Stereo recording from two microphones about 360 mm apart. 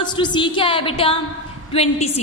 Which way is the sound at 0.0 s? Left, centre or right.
Centre.